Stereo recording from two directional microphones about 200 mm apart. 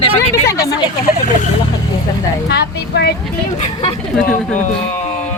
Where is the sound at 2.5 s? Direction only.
55° left (ahead or behind).